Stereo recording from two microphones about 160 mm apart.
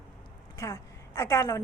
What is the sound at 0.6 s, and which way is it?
A woman's voice, 20° left (ahead or behind).